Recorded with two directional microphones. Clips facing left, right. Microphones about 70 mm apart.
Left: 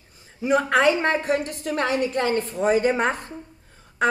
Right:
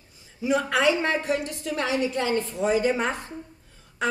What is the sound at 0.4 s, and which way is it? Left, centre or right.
A woman's voice, left.